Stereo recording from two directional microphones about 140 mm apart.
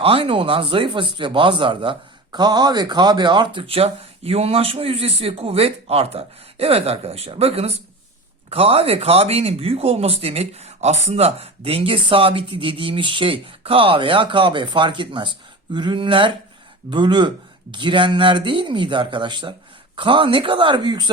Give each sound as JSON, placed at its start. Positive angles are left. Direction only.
{"t": 0.0, "sound": "speech", "side_deg": -40}